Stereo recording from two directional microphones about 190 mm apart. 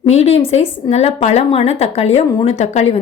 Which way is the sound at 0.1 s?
35° left (ahead or behind).